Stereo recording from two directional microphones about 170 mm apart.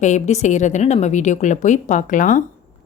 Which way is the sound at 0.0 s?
40° left (ahead or behind).